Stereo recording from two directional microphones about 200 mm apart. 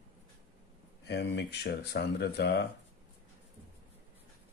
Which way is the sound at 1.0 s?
55° left (ahead or behind).